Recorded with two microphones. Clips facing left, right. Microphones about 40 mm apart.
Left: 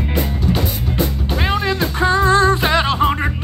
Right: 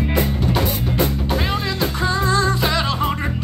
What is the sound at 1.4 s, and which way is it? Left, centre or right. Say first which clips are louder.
Music: left 3 dB; left.